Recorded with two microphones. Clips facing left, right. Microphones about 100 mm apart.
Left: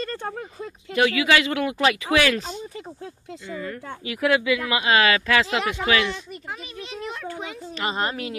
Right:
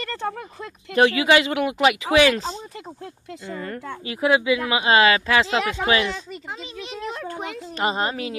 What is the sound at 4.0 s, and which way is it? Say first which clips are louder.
A woman's voice: right 1 dB; 25° right (ahead or behind).